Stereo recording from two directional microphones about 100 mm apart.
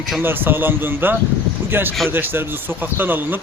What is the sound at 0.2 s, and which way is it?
Speech, 20° right (ahead or behind).